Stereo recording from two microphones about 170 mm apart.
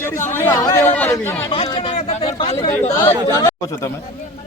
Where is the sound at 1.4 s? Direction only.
30° left (ahead or behind).